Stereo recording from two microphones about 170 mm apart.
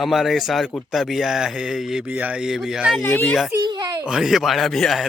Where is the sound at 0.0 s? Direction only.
Centre (ahead or behind).